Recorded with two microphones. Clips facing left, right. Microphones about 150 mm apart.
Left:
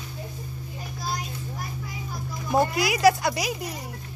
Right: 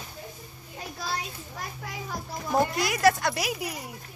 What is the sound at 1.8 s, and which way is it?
Music, 75° right (ahead or behind).